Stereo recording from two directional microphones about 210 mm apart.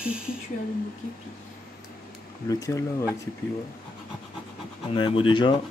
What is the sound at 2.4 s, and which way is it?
Speech, 15° left (ahead or behind).